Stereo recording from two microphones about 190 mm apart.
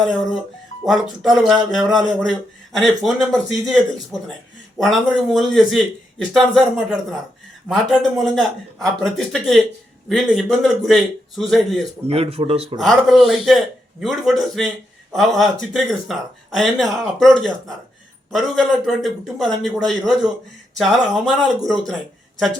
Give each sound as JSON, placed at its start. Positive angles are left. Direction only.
{"t": 0.9, "sound": "speech", "side_deg": -5}
{"t": 7.7, "sound": "speech", "side_deg": 0}
{"t": 12.0, "sound": "speech", "side_deg": -30}
{"t": 12.8, "sound": "speech", "side_deg": 0}